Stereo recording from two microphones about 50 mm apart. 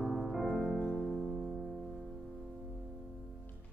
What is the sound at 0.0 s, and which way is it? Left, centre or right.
Music, centre.